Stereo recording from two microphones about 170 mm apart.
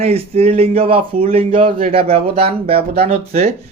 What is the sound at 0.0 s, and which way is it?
A man's voice, 35° right (ahead or behind).